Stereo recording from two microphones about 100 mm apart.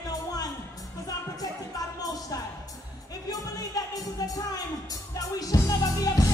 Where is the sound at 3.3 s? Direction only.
40° left (ahead or behind).